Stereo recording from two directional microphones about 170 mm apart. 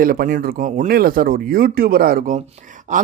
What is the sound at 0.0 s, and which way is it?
A man's voice, 55° right (ahead or behind).